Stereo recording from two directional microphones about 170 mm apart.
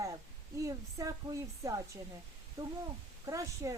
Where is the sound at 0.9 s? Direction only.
20° right (ahead or behind).